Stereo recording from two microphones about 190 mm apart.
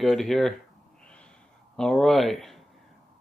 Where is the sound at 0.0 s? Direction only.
Centre (ahead or behind).